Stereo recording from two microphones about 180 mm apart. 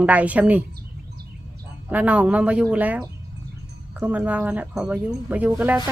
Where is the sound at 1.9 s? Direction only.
10° right (ahead or behind).